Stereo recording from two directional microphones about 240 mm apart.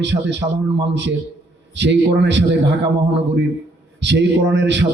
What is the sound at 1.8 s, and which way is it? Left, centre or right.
Speech, right.